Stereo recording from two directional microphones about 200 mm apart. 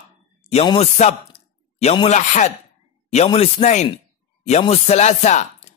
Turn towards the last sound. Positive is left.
turn(degrees=35)  # may be behind; listen again after turning